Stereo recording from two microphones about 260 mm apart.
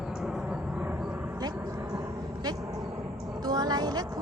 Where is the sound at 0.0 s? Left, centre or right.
Centre.